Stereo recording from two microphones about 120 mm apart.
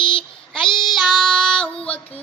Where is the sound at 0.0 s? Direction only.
45° left (ahead or behind).